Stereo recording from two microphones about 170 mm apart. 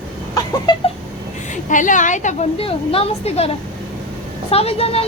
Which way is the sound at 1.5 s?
50° left (ahead or behind).